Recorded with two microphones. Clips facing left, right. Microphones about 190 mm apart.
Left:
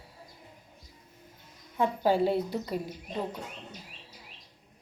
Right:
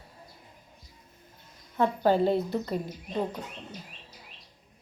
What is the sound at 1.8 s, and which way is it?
Speech, 10° left (ahead or behind).